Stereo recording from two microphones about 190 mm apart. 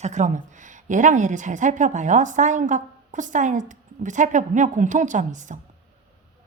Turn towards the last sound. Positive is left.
turn(degrees=-40)  # may be behind; listen again after turning